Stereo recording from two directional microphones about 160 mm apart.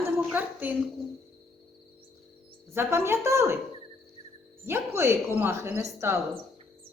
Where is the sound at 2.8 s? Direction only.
15° right (ahead or behind).